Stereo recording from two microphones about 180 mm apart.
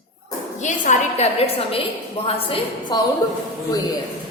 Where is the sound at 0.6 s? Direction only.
40° left (ahead or behind); by 3.4 s 20° left (ahead or behind).